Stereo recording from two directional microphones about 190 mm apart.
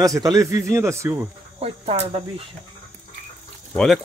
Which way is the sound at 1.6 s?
30° right (ahead or behind).